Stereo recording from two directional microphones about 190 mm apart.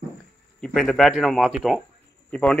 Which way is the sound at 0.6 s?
Centre (ahead or behind).